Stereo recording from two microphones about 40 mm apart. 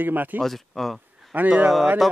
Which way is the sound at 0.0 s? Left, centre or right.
Right.